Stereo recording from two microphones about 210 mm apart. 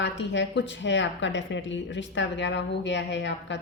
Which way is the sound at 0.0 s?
60° left (ahead or behind).